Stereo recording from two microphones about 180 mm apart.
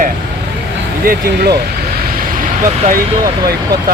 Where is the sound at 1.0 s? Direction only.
60° right (ahead or behind).